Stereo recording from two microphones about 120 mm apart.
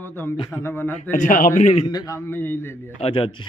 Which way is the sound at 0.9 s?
90° left.